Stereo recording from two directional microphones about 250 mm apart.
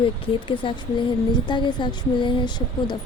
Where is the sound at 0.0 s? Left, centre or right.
Centre.